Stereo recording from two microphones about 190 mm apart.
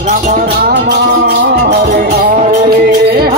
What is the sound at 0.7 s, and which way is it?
Music, 55° right (ahead or behind).